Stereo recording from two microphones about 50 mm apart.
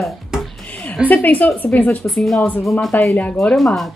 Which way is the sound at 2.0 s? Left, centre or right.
Centre.